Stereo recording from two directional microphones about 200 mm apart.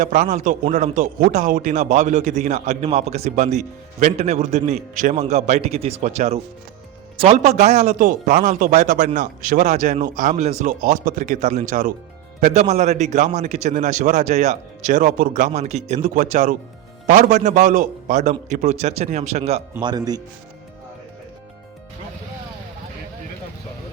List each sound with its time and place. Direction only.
0.0 s a man's voice: 40° right (ahead or behind)
19.8 s speech: 20° right (ahead or behind)